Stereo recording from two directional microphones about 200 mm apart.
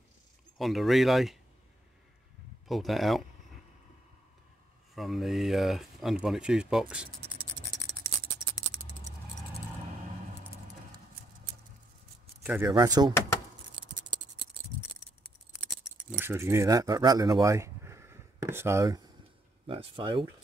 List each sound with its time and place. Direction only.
0.6 s speech: centre (ahead or behind)
2.7 s speech: centre (ahead or behind)
4.9 s speech: centre (ahead or behind)
12.4 s speech: 10° right (ahead or behind)
13.7 s scissors: 25° right (ahead or behind)
16.1 s speech: 10° right (ahead or behind)
19.6 s speech: 25° right (ahead or behind)